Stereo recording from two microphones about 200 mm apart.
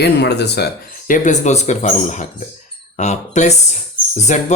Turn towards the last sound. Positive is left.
turn(degrees=40)  # may be behind; listen again after turning